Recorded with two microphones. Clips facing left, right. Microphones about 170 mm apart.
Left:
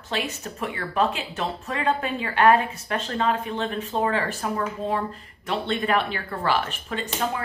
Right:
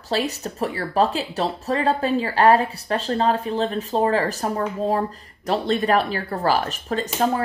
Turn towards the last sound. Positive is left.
turn(degrees=-40)  # may be behind; listen again after turning